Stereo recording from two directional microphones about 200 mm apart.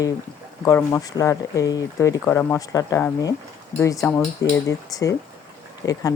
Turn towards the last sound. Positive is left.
turn(degrees=20)  # may be behind; listen again after turning